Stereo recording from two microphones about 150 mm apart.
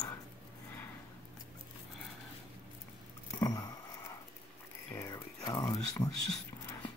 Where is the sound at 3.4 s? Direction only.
25° left (ahead or behind).